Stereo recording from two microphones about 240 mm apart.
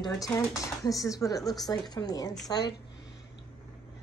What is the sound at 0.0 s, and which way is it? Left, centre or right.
A woman's voice, centre.